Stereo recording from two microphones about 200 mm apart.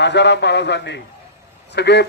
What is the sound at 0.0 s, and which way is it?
A man's voice, 60° left (ahead or behind).